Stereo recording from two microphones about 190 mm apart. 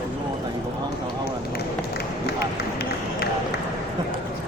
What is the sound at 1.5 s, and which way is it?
Run, 55° left (ahead or behind).